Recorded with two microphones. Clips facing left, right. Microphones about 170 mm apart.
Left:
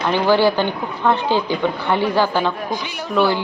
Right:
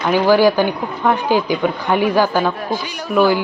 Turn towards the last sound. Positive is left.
turn(degrees=-15)  # may be behind; listen again after turning